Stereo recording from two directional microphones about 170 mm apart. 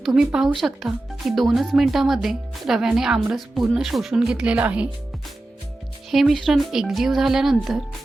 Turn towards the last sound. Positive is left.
turn(degrees=0)  # may be behind; listen again after turning